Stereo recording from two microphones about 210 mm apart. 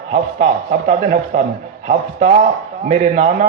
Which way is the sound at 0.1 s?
35° right (ahead or behind).